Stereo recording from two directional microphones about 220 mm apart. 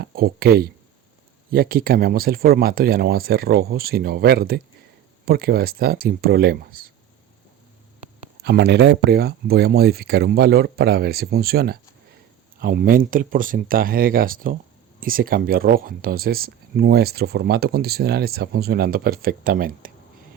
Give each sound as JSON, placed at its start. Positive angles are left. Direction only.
{"t": 0.0, "sound": "speech", "side_deg": -45}
{"t": 8.4, "sound": "speech", "side_deg": -50}